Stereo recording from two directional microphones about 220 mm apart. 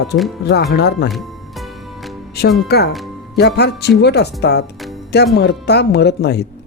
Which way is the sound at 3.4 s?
50° left (ahead or behind).